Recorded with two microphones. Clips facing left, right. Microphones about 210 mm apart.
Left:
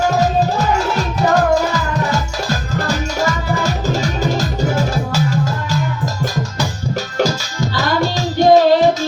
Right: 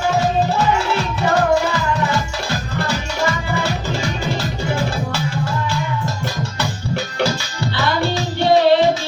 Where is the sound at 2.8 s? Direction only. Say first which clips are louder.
Left 2 dB; 40° left (ahead or behind).